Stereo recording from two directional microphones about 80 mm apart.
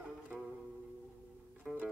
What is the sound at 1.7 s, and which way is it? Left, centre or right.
Music, centre.